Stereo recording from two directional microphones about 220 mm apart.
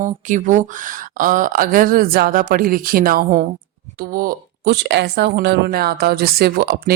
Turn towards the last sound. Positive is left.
turn(degrees=-45)  # may be behind; listen again after turning